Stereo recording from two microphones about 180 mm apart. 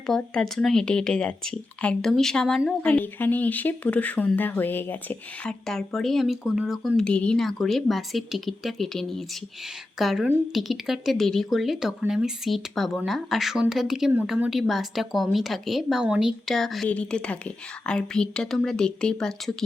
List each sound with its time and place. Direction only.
0.1 s a woman's voice: 5° left (ahead or behind)